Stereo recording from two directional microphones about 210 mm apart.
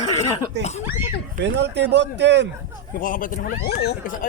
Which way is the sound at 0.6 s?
30° left (ahead or behind).